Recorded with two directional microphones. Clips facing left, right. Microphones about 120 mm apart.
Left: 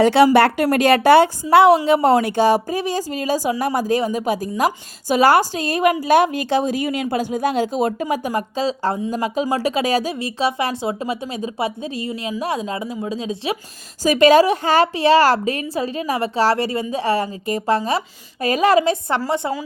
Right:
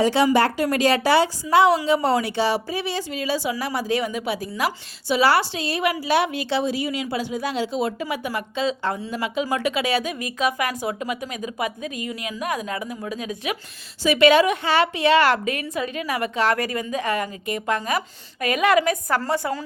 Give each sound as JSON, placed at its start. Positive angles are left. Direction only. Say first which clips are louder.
{"t": 0.0, "sound": "a woman's voice", "louder": "left 5 dB", "side_deg": 65}
{"t": 14.0, "sound": "a woman's voice", "louder": "left 3 dB", "side_deg": 40}